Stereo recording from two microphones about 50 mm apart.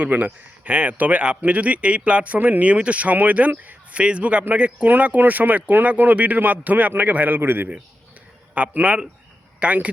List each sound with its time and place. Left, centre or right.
0.0 s speech: right
8.5 s speech: right